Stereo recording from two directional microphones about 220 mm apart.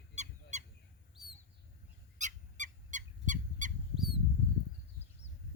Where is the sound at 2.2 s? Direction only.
35° right (ahead or behind).